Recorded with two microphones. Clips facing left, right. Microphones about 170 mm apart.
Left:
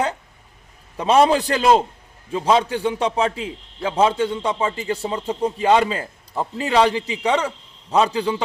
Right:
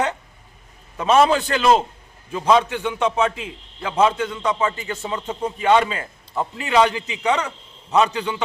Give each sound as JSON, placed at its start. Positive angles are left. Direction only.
{"t": 0.9, "sound": "a man's voice", "side_deg": 30}